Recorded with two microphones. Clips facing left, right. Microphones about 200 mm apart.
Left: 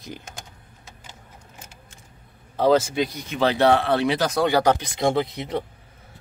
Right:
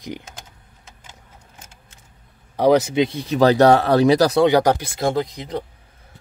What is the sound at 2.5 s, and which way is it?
Speech, 15° right (ahead or behind).